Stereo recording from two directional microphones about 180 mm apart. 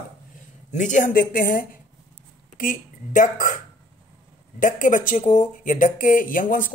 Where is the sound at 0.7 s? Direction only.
45° left (ahead or behind).